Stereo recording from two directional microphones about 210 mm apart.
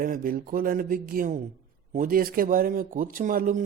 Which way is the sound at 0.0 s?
40° right (ahead or behind).